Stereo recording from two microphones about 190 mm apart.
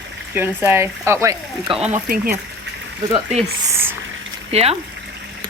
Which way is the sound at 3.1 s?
35° right (ahead or behind).